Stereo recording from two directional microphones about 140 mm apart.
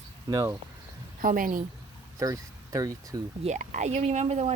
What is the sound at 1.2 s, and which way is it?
Speech, 70° right (ahead or behind).